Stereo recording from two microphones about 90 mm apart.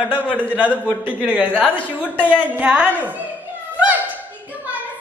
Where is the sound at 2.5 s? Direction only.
15° right (ahead or behind).